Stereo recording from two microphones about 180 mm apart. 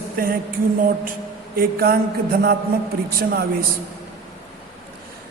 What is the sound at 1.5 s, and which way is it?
Speech, 55° right (ahead or behind).